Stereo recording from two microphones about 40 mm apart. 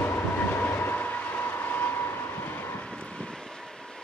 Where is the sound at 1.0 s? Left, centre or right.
Left.